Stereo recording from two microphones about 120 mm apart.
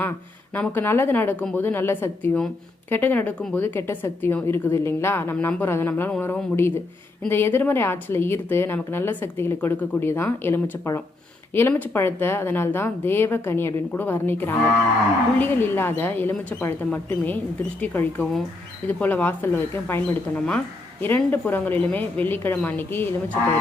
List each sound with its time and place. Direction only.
0.5 s a woman's voice: 15° left (ahead or behind)